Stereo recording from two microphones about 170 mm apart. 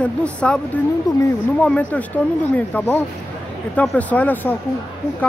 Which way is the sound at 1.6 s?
10° left (ahead or behind).